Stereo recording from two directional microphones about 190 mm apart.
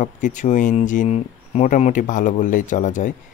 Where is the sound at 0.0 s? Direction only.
40° left (ahead or behind).